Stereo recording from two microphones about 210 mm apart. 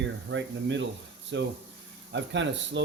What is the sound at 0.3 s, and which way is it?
Speech, 60° right (ahead or behind).